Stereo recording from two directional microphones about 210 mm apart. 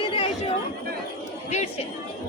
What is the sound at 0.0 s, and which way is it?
Chatter, 25° left (ahead or behind).